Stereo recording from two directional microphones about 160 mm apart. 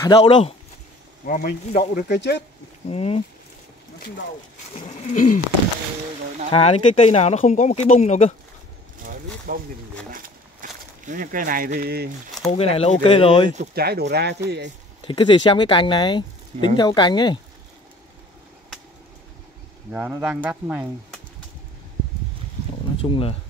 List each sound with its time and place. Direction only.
0.0 s speech: 30° left (ahead or behind)
1.2 s speech: 65° left (ahead or behind)
2.0 s speech: 90° left
2.9 s speech: 40° left (ahead or behind)
5.1 s speech: 50° left (ahead or behind)
6.5 s speech: 35° left (ahead or behind)
9.5 s speech: 60° right (ahead or behind)
10.1 s a sound: 60° right (ahead or behind); by 12.1 s 75° right (ahead or behind)
12.4 s speech: 40° left (ahead or behind)
13.7 s speech: 85° right
15.0 s speech: 30° left (ahead or behind)
19.9 s speech: 10° right (ahead or behind)
23.0 s speech: 35° left (ahead or behind)